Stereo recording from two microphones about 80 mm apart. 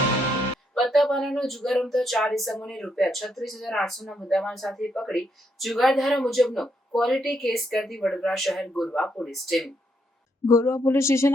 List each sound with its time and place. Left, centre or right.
0.7 s speech: centre
10.4 s speech: left